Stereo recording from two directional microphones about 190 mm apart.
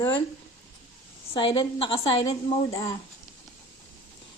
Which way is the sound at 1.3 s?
25° left (ahead or behind).